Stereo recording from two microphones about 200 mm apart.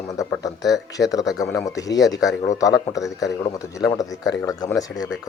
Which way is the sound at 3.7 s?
15° left (ahead or behind).